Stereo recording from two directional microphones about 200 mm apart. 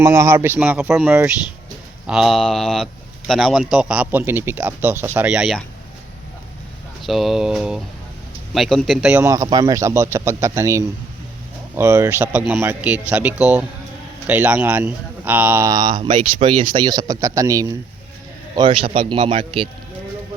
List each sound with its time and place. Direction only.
0.0 s a man's voice: 15° right (ahead or behind)
7.0 s a man's voice: centre (ahead or behind)
9.2 s speech: 15° right (ahead or behind)
16.0 s speech: 40° right (ahead or behind)
16.7 s a man's voice: 20° right (ahead or behind)